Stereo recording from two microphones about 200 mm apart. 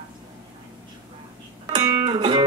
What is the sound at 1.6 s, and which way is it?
Music, 20° right (ahead or behind).